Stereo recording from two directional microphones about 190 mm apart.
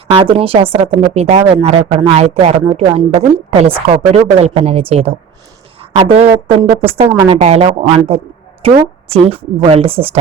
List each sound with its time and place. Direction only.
0.1 s a woman's voice: 30° right (ahead or behind)